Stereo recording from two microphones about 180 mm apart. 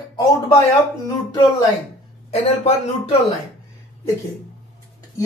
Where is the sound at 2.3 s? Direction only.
35° left (ahead or behind).